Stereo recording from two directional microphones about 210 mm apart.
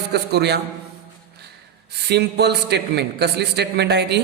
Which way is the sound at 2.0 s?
50° right (ahead or behind).